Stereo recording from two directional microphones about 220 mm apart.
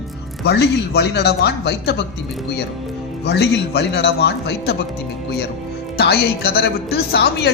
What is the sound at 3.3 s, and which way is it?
Speech, 50° left (ahead or behind).